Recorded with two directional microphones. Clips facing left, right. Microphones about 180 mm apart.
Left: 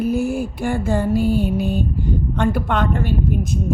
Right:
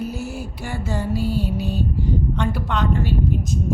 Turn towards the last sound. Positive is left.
turn(degrees=55)  # may be behind; listen again after turning